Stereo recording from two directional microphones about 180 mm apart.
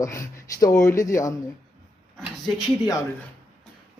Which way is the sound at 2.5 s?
20° left (ahead or behind).